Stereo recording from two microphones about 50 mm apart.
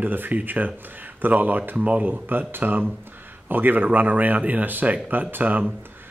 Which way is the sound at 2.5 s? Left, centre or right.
Right.